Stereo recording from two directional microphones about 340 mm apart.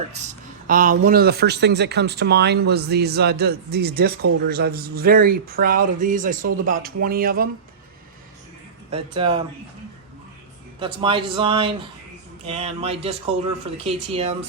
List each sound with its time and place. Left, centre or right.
0.7 s speech: right
8.9 s a man's voice: centre
10.8 s a man's voice: centre